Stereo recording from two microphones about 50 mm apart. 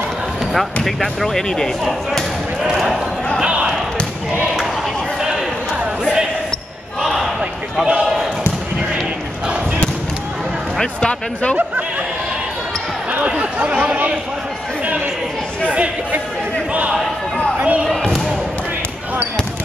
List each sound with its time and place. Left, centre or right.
0.8 s speech: centre
2.7 s speech: centre
7.0 s basketball bounce: centre
13.3 s speech: right
15.7 s speech: right
17.6 s speech: right
17.8 s speech: centre